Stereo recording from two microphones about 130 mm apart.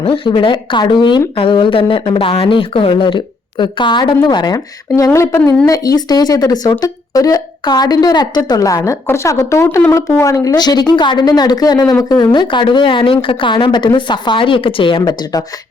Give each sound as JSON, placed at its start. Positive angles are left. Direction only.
{"t": 0.0, "sound": "a woman's voice", "side_deg": 40}